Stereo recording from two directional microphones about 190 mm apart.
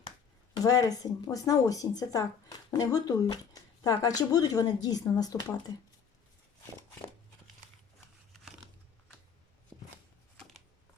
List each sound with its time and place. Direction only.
0.5 s speech: 20° left (ahead or behind)
9.7 s shuffling cards: 5° right (ahead or behind)
10.3 s a sound: 5° left (ahead or behind)